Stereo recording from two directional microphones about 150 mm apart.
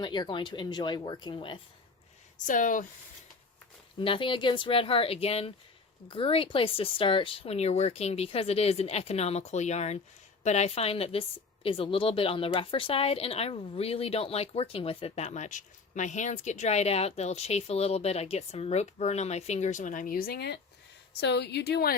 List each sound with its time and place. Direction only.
0.0 s speech: 30° left (ahead or behind)
2.5 s speech: 60° left (ahead or behind)
4.0 s a woman's voice: 35° left (ahead or behind); by 21.9 s 90° left